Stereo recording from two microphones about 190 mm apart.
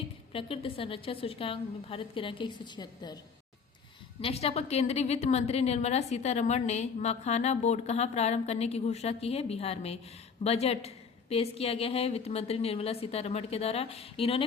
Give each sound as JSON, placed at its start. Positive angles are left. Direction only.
{"t": 0.3, "sound": "a woman's voice", "side_deg": 30}
{"t": 4.2, "sound": "a woman's voice", "side_deg": 30}